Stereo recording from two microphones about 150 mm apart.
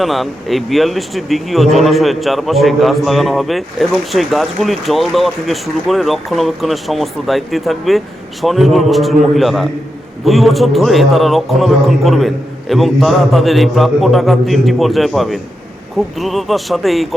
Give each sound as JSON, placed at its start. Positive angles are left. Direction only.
{"t": 0.0, "sound": "speech", "side_deg": 0}